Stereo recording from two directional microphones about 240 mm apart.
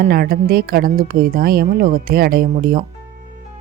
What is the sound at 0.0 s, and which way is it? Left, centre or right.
Speech, right.